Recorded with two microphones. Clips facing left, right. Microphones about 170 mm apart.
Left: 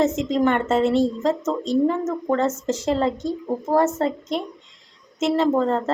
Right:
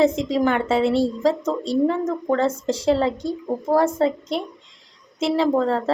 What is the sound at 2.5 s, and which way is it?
Speech, 35° right (ahead or behind).